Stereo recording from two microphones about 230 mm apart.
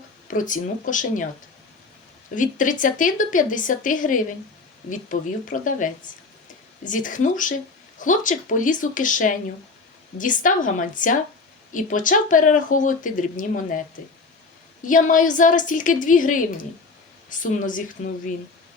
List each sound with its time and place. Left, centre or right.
0.3 s speech: left
2.3 s speech: left
14.8 s speech: left